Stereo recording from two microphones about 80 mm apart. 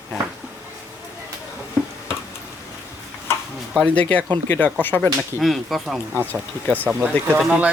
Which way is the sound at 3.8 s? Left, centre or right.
Centre.